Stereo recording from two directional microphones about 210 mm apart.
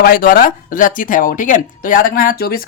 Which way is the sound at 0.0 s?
45° left (ahead or behind).